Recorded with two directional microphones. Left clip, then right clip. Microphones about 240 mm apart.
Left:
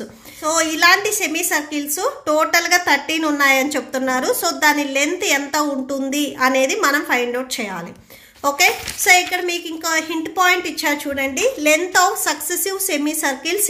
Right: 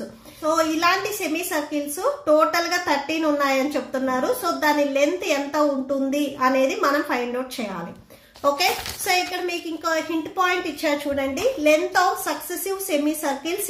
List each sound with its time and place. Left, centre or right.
0.4 s a woman's voice: left